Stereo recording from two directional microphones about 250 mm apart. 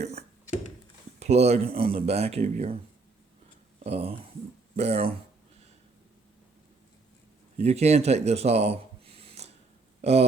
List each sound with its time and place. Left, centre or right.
0.0 s a sound: right
1.2 s speech: right
3.8 s speech: right
7.6 s speech: right